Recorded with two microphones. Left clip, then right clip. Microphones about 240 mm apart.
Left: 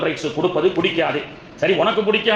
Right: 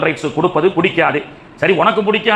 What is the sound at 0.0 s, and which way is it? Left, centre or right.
A man's voice, right.